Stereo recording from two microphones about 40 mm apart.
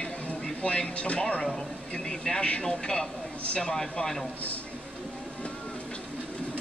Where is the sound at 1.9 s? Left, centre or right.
Centre.